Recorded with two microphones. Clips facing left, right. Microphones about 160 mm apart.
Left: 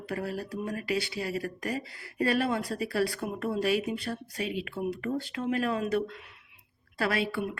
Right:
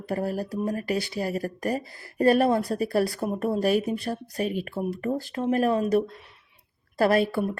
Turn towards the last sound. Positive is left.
turn(degrees=-40)  # may be behind; listen again after turning